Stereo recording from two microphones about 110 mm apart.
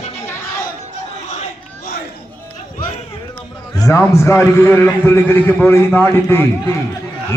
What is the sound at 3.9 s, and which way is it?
A man's voice, 25° left (ahead or behind).